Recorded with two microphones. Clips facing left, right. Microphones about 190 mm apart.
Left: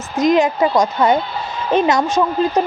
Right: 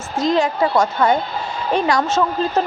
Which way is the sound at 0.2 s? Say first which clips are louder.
Left 3 dB; 20° left (ahead or behind).